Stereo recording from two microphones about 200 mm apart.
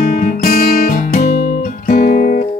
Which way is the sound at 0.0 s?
40° left (ahead or behind).